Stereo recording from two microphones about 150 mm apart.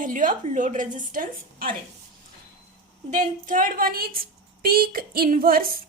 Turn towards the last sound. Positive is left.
turn(degrees=-75)  # may be behind; listen again after turning